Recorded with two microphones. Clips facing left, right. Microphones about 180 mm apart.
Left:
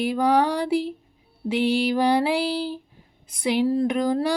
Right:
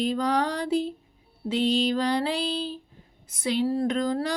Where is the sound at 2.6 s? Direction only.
70° left (ahead or behind).